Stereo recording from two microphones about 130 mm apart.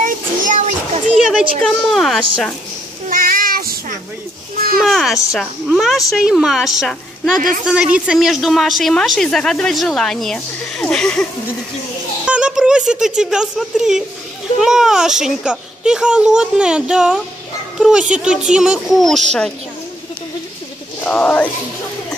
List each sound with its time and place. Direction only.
0.0 s a sound: 70° right (ahead or behind)
1.6 s a woman's voice: centre (ahead or behind)
3.1 s child singing: 90° right
4.8 s a woman's voice: centre (ahead or behind)
7.3 s a woman's voice: 90° right
7.6 s a woman's voice: 5° right (ahead or behind)
12.3 s a woman's voice: 5° right (ahead or behind)
21.0 s speech: 10° left (ahead or behind)